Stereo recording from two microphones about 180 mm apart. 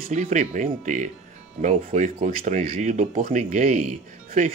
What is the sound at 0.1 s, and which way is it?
Speech, 40° right (ahead or behind).